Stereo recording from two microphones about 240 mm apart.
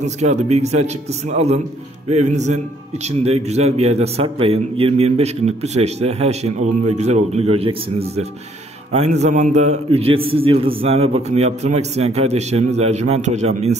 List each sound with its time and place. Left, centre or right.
0.0 s speech: right